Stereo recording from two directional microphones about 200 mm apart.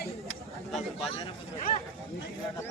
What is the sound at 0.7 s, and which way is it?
Speech, 30° left (ahead or behind).